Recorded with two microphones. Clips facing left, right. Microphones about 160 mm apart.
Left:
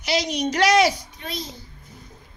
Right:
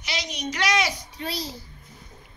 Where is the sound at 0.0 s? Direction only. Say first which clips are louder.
Left 9 dB; 40° left (ahead or behind).